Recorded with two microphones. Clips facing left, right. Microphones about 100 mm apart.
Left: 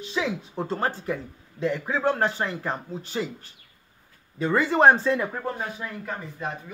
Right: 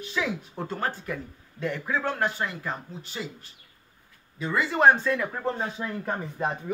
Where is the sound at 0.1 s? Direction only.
20° left (ahead or behind); by 3.3 s 40° left (ahead or behind).